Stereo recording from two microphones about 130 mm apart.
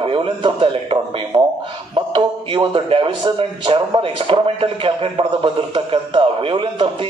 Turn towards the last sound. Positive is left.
turn(degrees=-40)  # may be behind; listen again after turning